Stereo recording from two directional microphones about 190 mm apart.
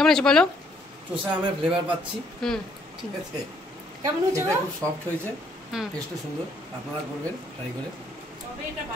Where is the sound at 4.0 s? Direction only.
15° right (ahead or behind).